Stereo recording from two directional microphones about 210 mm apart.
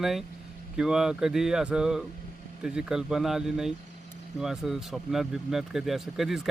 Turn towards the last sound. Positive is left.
turn(degrees=0)  # may be behind; listen again after turning